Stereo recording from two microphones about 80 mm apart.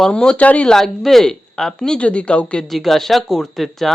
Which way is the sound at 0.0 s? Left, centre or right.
Centre.